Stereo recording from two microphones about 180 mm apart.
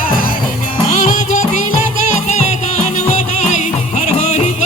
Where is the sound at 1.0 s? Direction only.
45° left (ahead or behind).